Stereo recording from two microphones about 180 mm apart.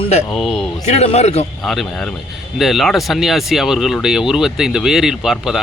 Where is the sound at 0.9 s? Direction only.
35° left (ahead or behind).